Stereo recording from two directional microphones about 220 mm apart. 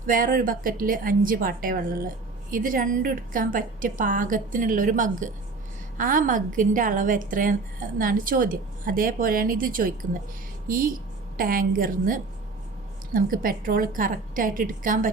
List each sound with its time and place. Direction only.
0.0 s a woman's voice: 40° right (ahead or behind)